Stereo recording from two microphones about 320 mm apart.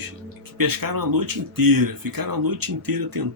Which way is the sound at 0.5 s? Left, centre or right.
Right.